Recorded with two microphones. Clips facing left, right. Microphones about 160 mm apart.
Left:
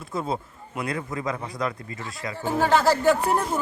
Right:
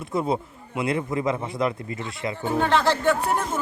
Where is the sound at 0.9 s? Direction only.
25° right (ahead or behind).